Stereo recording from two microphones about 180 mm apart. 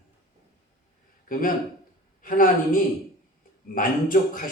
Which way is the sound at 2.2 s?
50° left (ahead or behind).